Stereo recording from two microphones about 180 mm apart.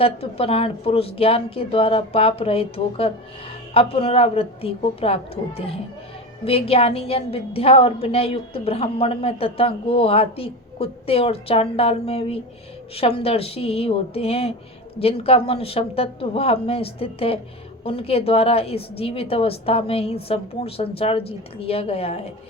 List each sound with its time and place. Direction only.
0.0 s a woman's voice: 30° left (ahead or behind)